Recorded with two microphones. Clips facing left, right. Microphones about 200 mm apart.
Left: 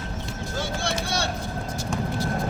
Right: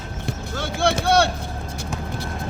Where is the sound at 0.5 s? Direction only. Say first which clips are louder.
Right 6 dB; 60° right (ahead or behind).